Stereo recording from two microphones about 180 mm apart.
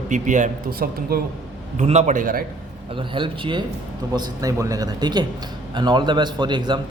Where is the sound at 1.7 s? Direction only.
40° right (ahead or behind).